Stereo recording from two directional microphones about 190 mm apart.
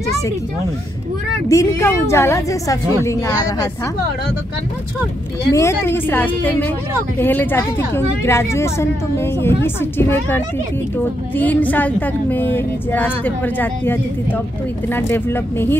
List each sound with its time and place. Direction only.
1.5 s a woman's voice: 15° left (ahead or behind)
5.5 s a woman's voice: 15° left (ahead or behind)